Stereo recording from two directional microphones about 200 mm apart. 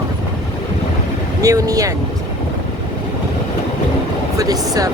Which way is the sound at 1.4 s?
15° right (ahead or behind).